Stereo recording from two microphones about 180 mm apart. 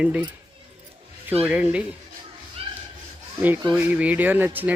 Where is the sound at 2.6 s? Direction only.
35° right (ahead or behind).